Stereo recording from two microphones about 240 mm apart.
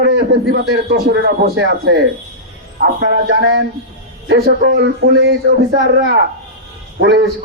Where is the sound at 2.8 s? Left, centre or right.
Right.